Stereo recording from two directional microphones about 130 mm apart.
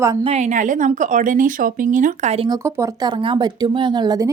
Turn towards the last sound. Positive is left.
turn(degrees=-30)  # may be behind; listen again after turning